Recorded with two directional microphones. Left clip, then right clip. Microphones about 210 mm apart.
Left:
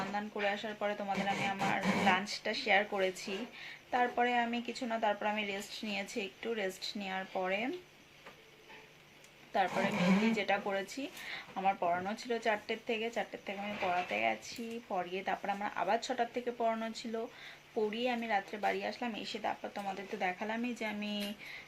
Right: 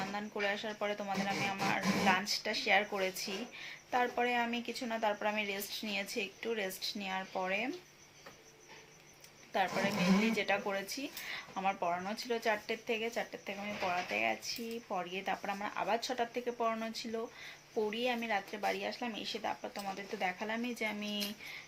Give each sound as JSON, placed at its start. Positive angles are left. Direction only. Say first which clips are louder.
{"t": 0.1, "sound": "speech", "louder": "left 1 dB", "side_deg": -5}
{"t": 9.5, "sound": "speech", "louder": "left 1 dB", "side_deg": 0}